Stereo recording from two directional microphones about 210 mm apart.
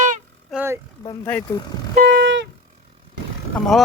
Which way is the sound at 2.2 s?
60° right (ahead or behind).